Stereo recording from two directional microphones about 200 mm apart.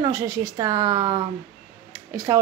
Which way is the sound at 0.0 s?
15° right (ahead or behind).